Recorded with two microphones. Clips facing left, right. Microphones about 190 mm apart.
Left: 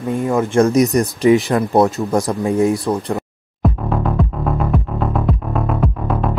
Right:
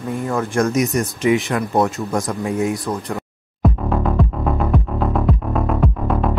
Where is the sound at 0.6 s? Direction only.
35° left (ahead or behind).